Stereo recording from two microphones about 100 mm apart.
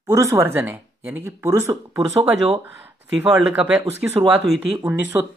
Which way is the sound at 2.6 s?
20° right (ahead or behind).